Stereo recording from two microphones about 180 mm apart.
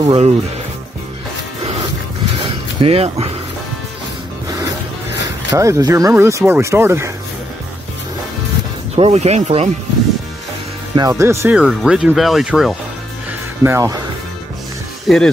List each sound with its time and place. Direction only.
0.0 s speech: 30° right (ahead or behind)
2.4 s a sound: 30° right (ahead or behind)
5.5 s speech: 20° right (ahead or behind)
8.9 s speech: 35° right (ahead or behind)
11.0 s speech: 20° right (ahead or behind); by 12.7 s centre (ahead or behind)
13.7 s speech: 15° right (ahead or behind)
15.1 s speech: centre (ahead or behind)